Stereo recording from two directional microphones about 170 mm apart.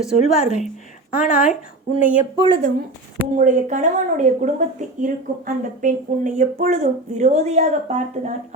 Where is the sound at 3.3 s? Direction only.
50° right (ahead or behind).